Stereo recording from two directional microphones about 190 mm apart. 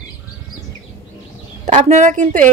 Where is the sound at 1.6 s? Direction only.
40° right (ahead or behind).